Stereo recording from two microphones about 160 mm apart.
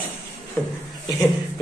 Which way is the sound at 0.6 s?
15° left (ahead or behind).